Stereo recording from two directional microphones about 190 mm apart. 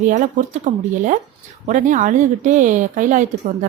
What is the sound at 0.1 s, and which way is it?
A woman's voice, 40° right (ahead or behind).